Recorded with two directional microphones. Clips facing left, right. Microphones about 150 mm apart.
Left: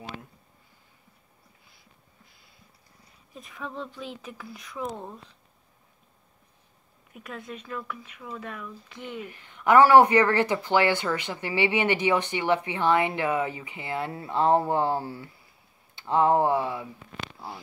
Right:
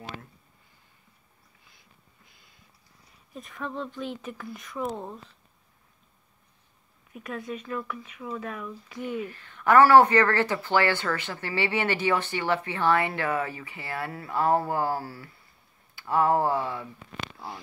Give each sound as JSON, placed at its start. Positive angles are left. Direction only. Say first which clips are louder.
{"t": 3.3, "sound": "speech", "louder": "right 2 dB", "side_deg": 0}
{"t": 7.2, "sound": "speech", "louder": "right 4 dB", "side_deg": 0}
{"t": 9.2, "sound": "speech", "louder": "even", "side_deg": 15}